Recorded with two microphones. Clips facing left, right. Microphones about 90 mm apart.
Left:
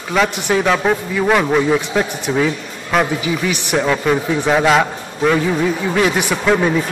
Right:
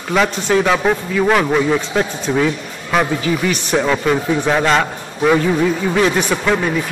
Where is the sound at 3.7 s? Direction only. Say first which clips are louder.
Even; centre (ahead or behind).